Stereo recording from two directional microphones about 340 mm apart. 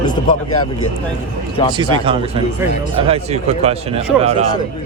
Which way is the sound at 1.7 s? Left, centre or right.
Centre.